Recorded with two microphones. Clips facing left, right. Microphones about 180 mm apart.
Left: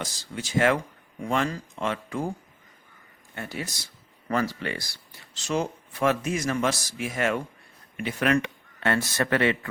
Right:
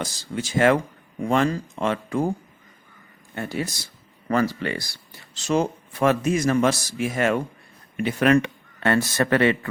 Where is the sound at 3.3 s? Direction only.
35° right (ahead or behind).